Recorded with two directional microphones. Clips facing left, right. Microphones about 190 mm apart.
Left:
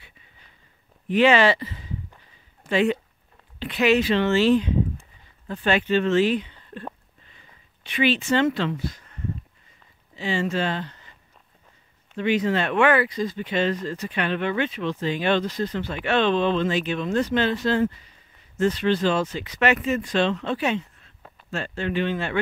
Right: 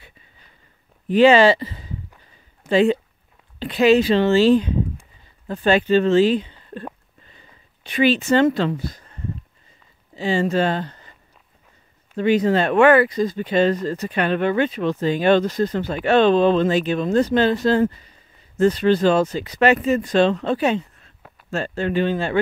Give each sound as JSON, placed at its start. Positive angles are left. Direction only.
{"t": 1.0, "sound": "speech", "side_deg": -35}
{"t": 7.8, "sound": "speech", "side_deg": -40}
{"t": 12.2, "sound": "speech", "side_deg": -40}